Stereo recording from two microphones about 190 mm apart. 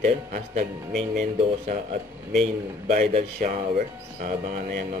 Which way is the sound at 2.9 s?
45° right (ahead or behind).